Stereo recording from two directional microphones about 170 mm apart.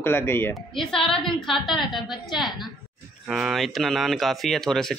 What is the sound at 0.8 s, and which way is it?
Speech, centre (ahead or behind).